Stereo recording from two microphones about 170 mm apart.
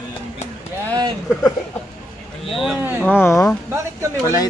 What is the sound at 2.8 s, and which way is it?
Speech, 10° right (ahead or behind).